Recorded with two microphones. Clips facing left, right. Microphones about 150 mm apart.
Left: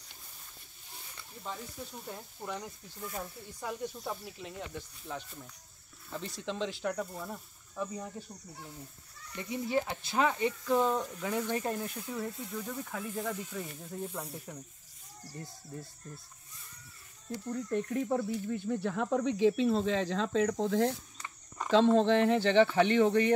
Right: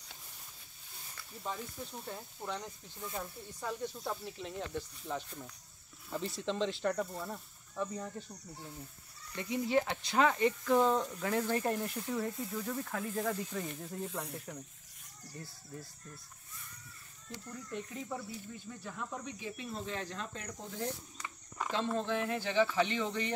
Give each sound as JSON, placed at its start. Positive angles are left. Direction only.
{"t": 1.4, "sound": "speech", "side_deg": 0}
{"t": 4.0, "sound": "speech", "side_deg": 5}
{"t": 9.4, "sound": "speech", "side_deg": -20}
{"t": 10.0, "sound": "speech", "side_deg": 5}
{"t": 17.3, "sound": "speech", "side_deg": 40}
{"t": 17.7, "sound": "speech", "side_deg": 55}
{"t": 22.8, "sound": "speech", "side_deg": 60}